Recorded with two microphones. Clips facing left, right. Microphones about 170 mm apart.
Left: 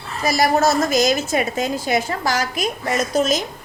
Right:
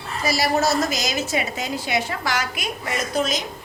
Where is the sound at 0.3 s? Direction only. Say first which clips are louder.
Left 4 dB; 50° left (ahead or behind).